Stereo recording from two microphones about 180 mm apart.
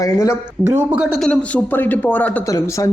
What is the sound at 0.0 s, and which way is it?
Speech, 15° left (ahead or behind).